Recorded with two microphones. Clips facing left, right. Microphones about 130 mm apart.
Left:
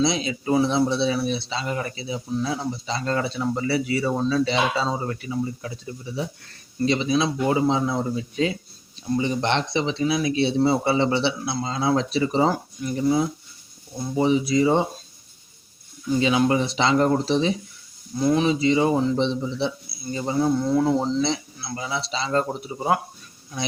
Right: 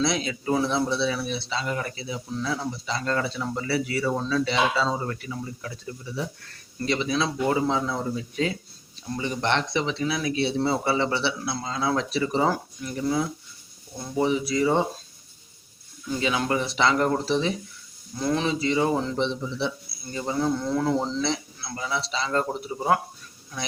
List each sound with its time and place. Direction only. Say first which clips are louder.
0.0 s speech: left 3 dB; 20° left (ahead or behind)
16.2 s speech: left 4 dB; 20° left (ahead or behind)